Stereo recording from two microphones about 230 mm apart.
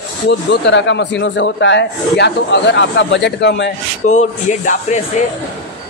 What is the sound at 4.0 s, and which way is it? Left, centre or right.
Speech, left.